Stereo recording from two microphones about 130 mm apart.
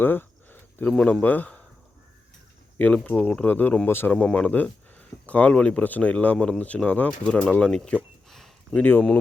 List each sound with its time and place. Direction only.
0.0 s speech: 15° left (ahead or behind)
2.7 s speech: 10° left (ahead or behind)